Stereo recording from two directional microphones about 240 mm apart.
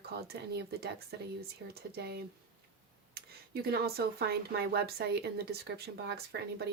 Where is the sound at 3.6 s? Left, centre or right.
Right.